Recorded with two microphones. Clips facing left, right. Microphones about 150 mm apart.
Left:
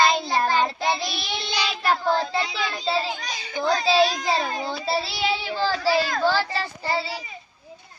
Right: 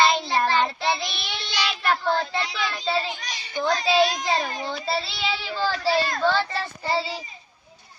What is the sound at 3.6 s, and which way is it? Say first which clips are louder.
Speech: left 1 dB; 30° left (ahead or behind).